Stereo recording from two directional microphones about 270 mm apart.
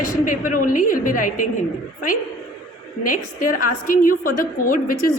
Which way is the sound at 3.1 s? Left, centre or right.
Left.